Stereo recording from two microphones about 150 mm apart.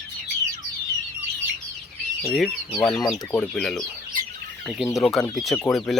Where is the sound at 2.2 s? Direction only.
5° left (ahead or behind).